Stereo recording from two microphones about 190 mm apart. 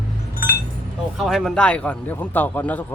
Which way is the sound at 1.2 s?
Centre (ahead or behind).